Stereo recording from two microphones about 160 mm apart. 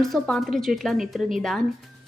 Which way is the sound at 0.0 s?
Centre (ahead or behind).